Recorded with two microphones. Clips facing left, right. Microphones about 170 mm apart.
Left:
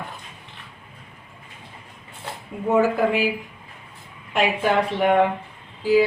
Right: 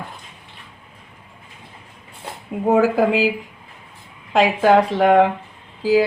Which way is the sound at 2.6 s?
90° right.